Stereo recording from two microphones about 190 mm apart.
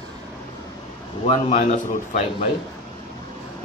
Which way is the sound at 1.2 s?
35° left (ahead or behind).